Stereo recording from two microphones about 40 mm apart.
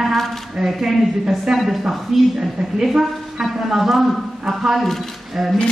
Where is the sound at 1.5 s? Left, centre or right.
Centre.